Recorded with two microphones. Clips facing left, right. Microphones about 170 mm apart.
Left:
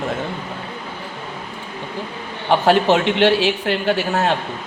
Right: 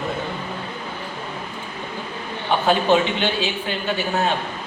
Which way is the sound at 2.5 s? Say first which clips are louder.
Left 3 dB; 80° left.